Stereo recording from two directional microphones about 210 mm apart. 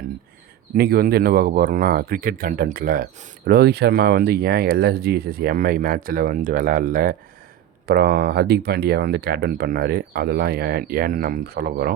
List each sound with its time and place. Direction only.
0.8 s speech: 45° right (ahead or behind)